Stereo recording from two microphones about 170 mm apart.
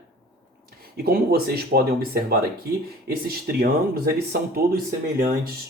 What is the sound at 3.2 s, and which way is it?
Speech, 65° right (ahead or behind).